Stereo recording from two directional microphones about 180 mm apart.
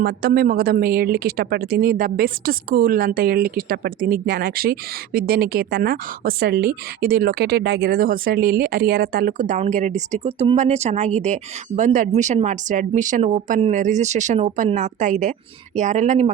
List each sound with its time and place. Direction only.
0.0 s speech: 55° right (ahead or behind); by 16.3 s 40° right (ahead or behind)